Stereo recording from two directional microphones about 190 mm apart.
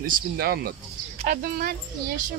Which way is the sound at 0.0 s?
55° right (ahead or behind).